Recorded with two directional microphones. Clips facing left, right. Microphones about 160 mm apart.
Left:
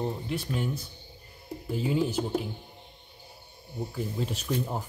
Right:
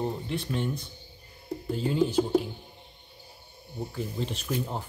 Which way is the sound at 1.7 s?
5° left (ahead or behind).